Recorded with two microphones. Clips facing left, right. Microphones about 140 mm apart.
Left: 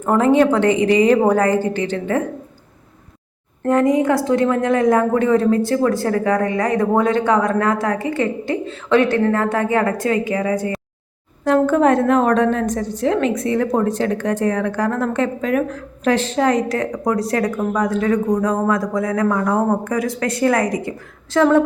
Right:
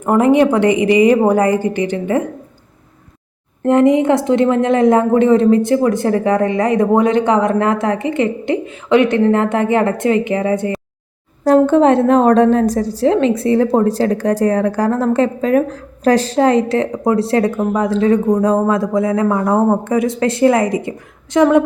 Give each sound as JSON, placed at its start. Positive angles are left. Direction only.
{"t": 0.0, "sound": "a woman's voice", "side_deg": -15}
{"t": 3.6, "sound": "a woman's voice", "side_deg": -20}